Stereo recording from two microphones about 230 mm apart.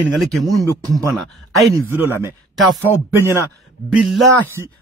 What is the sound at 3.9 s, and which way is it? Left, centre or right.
Speech, centre.